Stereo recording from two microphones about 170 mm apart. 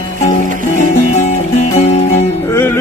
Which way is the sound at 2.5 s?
15° left (ahead or behind).